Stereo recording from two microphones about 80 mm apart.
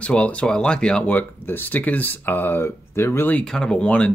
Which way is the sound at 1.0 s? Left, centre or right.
Left.